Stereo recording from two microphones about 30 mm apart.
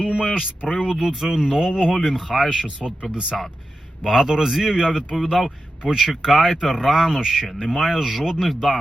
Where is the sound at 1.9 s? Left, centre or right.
Centre.